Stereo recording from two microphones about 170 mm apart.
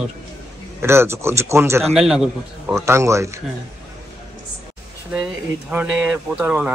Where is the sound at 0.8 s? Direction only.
15° right (ahead or behind).